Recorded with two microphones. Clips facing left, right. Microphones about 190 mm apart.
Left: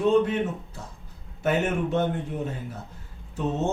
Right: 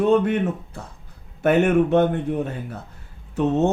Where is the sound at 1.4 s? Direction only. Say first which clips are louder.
Right 8 dB; 65° right (ahead or behind).